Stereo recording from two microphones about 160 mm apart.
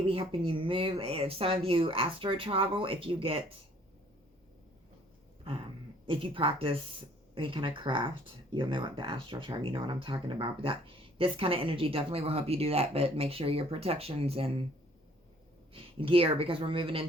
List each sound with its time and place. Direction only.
0.0 s speech: 35° right (ahead or behind)
6.1 s speech: 35° right (ahead or behind)
15.7 s speech: 35° right (ahead or behind)